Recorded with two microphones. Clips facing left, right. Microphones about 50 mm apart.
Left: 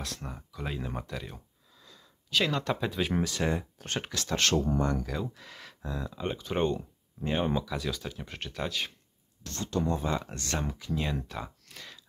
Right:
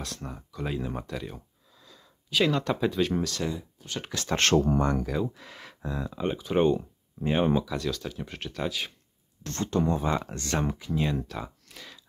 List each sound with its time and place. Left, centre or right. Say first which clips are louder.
0.0 s speech: right 2 dB; centre
3.0 s speech: right 2 dB; centre
3.5 s a sound: left 5 dB; left
4.1 s speech: right 6 dB; right
4.7 s speech: right 3 dB; right
5.0 s speech: right 5 dB; centre
7.6 s speech: right 3 dB; centre
9.4 s speech: right 4 dB; right
11.0 s speech: right 5 dB; centre